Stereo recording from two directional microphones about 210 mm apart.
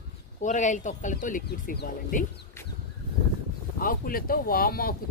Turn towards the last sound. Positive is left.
turn(degrees=45)  # may be behind; listen again after turning